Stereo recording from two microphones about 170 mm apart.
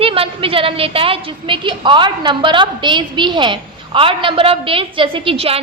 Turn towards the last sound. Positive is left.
turn(degrees=-35)  # may be behind; listen again after turning